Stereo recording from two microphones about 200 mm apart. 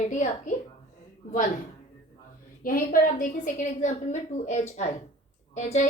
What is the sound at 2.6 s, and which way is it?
A woman's voice, 45° left (ahead or behind).